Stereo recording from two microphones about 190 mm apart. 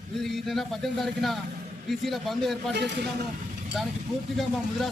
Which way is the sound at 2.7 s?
60° right (ahead or behind).